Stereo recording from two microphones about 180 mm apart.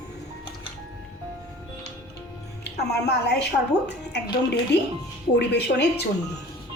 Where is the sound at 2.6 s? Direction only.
65° left (ahead or behind).